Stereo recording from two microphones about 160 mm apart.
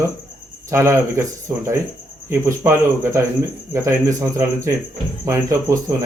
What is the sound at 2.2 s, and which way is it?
A man's voice, 15° right (ahead or behind).